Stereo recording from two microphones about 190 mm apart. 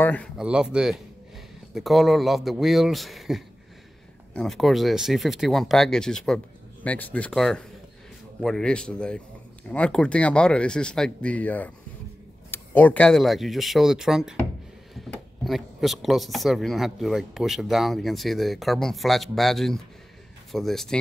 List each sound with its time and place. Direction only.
0.0 s speech: 10° left (ahead or behind)
0.4 s speech: 5° right (ahead or behind)